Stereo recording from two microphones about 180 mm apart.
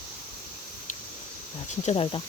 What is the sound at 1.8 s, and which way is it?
Speech, 30° left (ahead or behind).